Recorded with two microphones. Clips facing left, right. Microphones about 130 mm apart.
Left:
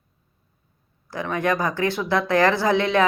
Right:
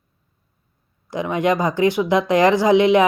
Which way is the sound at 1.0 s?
20° right (ahead or behind).